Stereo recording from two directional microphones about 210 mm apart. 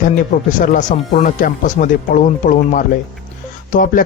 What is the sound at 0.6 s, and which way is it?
Speech, 35° left (ahead or behind).